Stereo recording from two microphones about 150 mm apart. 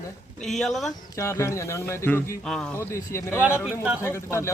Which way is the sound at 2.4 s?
5° left (ahead or behind).